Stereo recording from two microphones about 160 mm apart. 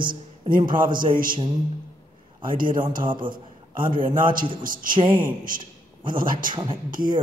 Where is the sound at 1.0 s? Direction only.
60° right (ahead or behind).